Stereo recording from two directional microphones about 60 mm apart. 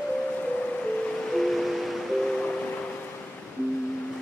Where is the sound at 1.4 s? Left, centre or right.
Centre.